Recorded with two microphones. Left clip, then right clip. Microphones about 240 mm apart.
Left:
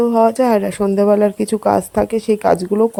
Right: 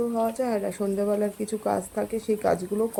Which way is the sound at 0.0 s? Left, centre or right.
Left.